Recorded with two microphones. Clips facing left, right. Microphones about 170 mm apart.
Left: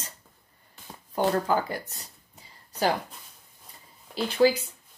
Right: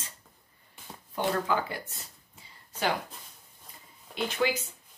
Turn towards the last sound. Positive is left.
turn(degrees=30)  # may be behind; listen again after turning